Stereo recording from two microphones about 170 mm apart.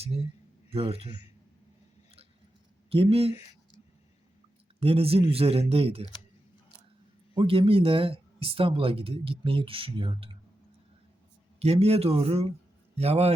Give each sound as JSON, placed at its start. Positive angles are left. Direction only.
{"t": 0.7, "sound": "speech", "side_deg": -35}
{"t": 2.9, "sound": "speech", "side_deg": -35}
{"t": 4.8, "sound": "speech", "side_deg": -35}
{"t": 7.3, "sound": "speech", "side_deg": -30}
{"t": 11.6, "sound": "speech", "side_deg": -40}